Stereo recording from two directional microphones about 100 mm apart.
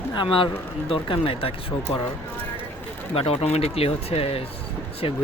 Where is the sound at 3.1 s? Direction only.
70° left (ahead or behind); by 4.5 s 90° left.